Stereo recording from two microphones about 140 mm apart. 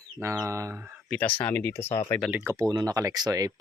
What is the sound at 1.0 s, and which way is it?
Speech, 10° left (ahead or behind).